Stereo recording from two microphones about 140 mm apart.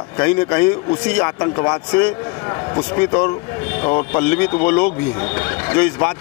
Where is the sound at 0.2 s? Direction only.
15° left (ahead or behind).